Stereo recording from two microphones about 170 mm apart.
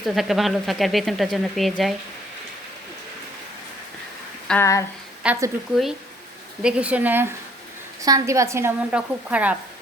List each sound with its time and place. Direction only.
0.0 s speech: centre (ahead or behind)
4.5 s speech: 5° left (ahead or behind)
5.2 s a woman's voice: 10° right (ahead or behind)